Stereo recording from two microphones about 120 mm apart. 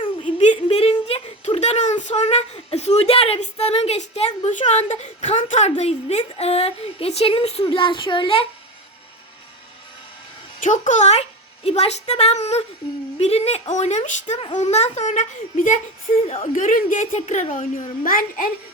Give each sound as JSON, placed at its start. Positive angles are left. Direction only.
{"t": 0.0, "sound": "a sound", "side_deg": 45}
{"t": 1.0, "sound": "speech", "side_deg": 60}
{"t": 10.6, "sound": "a woman's voice", "side_deg": 90}
{"t": 16.2, "sound": "speech", "side_deg": 65}